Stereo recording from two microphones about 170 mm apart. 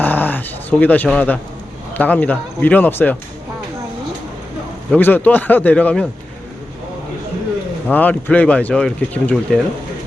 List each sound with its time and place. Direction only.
0.0 s dog: 10° left (ahead or behind)
1.9 s speech: 10° left (ahead or behind)
4.9 s speech: 10° left (ahead or behind)
7.9 s speech: 10° left (ahead or behind)